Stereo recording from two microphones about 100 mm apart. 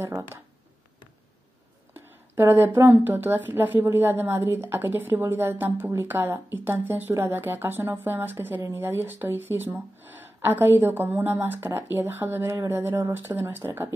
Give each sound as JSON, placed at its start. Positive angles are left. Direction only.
{"t": 0.0, "sound": "a woman's voice", "side_deg": -25}
{"t": 2.0, "sound": "a woman's voice", "side_deg": -25}